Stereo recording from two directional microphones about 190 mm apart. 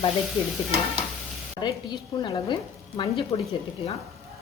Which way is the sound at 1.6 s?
20° left (ahead or behind).